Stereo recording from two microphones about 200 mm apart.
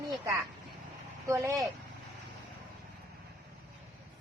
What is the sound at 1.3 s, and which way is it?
Speech, 15° right (ahead or behind).